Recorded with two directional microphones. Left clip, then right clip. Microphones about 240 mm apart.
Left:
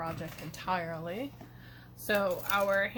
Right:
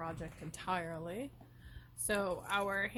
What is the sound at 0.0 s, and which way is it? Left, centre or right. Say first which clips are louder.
Speech: left 5 dB; right.